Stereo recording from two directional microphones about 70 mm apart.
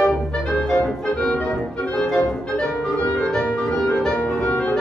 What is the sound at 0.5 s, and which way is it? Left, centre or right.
Music, centre.